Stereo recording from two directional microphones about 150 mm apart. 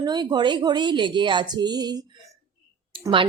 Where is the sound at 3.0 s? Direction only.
20° right (ahead or behind).